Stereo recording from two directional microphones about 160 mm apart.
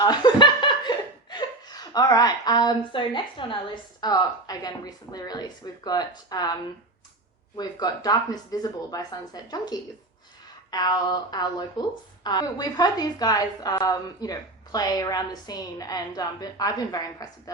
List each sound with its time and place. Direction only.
0.0 s laughter: 25° left (ahead or behind)
4.0 s a woman's voice: 25° left (ahead or behind)
7.5 s a woman's voice: 25° left (ahead or behind)